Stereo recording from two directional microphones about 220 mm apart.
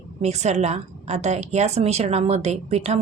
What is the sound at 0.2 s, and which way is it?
A woman's voice, 30° right (ahead or behind).